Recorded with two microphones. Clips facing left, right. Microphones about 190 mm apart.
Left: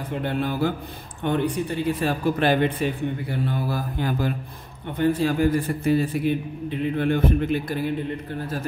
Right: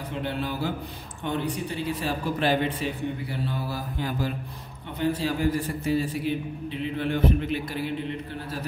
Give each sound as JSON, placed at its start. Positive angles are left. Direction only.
{"t": 0.2, "sound": "a man's voice", "side_deg": 50}